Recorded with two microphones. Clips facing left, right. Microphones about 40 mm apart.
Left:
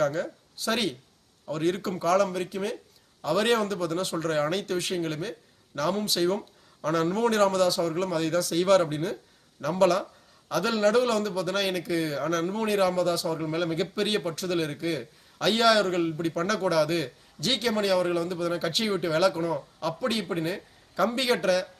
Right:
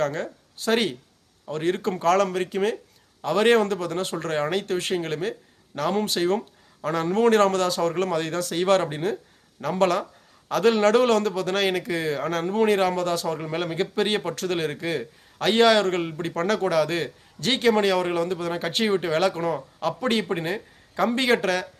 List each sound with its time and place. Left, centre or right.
0.0 s a man's voice: right
3.2 s a man's voice: right
6.8 s a man's voice: centre
7.1 s a man's voice: right
13.4 s a man's voice: right